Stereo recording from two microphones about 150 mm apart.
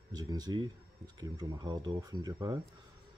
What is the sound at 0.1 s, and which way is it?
Speech, 25° right (ahead or behind).